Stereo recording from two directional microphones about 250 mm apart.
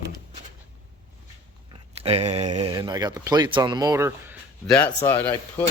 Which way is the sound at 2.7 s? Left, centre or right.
Centre.